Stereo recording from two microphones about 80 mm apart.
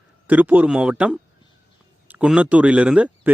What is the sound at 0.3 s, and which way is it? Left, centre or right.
Speech, centre.